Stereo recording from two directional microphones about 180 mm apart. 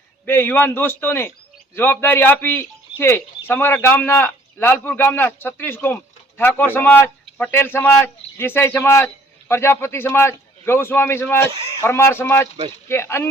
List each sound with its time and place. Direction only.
0.3 s speech: 10° left (ahead or behind)
11.5 s a man's voice: 30° right (ahead or behind)
11.8 s speech: 15° left (ahead or behind)